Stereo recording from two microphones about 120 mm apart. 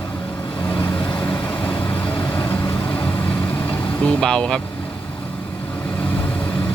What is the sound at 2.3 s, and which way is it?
Vehicle, 20° left (ahead or behind).